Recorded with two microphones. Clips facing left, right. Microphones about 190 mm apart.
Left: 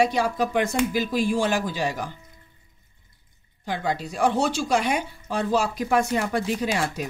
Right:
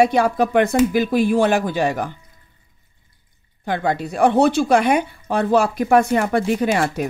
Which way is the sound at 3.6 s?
60° right (ahead or behind).